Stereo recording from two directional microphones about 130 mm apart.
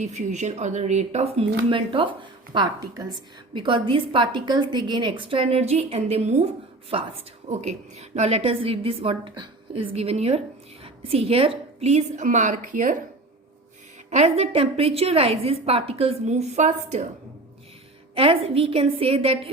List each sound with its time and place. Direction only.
0.0 s a woman's voice: 65° right (ahead or behind); by 9.8 s 35° right (ahead or behind)
9.9 s a woman's voice: 50° right (ahead or behind); by 13.0 s 85° right
14.1 s a woman's voice: 55° right (ahead or behind)
18.1 s a woman's voice: 45° right (ahead or behind)